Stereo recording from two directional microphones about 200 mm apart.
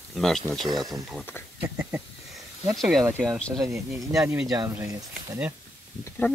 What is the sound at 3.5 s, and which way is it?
Speech, 15° right (ahead or behind).